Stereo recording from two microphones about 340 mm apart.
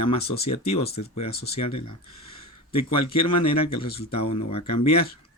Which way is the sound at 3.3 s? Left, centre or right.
Centre.